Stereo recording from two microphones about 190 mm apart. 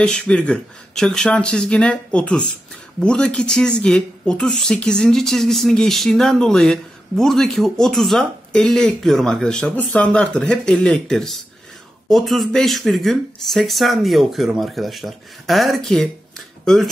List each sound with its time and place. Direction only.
0.0 s a woman's voice: 5° left (ahead or behind)